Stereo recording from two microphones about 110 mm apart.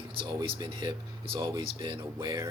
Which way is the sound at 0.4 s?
45° right (ahead or behind).